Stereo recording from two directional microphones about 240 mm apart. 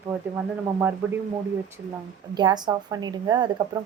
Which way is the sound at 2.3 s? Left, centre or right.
Centre.